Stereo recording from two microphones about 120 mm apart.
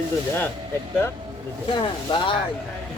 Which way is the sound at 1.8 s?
40° left (ahead or behind).